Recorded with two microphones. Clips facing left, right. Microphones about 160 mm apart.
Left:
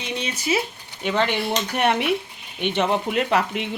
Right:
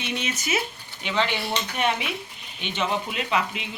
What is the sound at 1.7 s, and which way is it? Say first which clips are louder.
Speech: left 7 dB; 65° left (ahead or behind).